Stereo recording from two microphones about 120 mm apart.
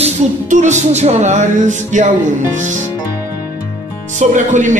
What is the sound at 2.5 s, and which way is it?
Speech, 90° right.